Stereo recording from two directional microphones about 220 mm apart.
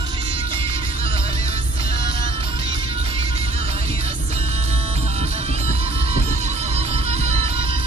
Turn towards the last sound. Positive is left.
turn(degrees=-25)  # may be behind; listen again after turning